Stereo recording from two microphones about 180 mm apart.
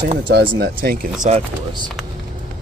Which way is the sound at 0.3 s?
60° right (ahead or behind).